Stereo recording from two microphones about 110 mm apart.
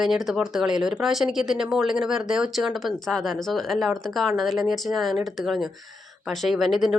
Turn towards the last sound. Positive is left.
turn(degrees=0)  # may be behind; listen again after turning